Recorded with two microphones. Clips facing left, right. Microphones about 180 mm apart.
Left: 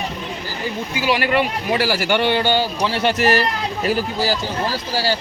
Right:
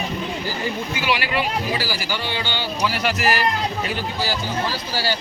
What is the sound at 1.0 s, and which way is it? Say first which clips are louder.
Speech: left 5 dB; 45° left (ahead or behind).